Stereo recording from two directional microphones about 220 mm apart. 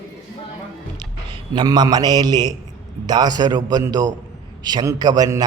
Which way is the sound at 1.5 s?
20° right (ahead or behind).